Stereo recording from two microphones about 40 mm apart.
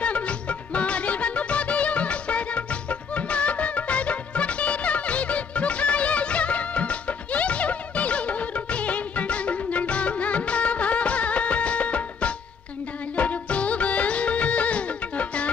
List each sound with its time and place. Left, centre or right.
0.0 s music: left